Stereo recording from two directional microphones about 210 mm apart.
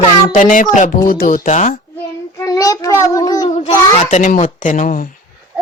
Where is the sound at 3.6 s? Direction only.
35° left (ahead or behind).